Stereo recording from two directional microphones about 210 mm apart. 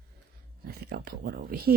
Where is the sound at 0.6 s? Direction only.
45° right (ahead or behind).